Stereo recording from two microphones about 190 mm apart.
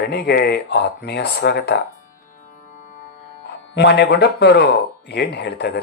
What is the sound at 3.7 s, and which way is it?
Speech, 65° left (ahead or behind).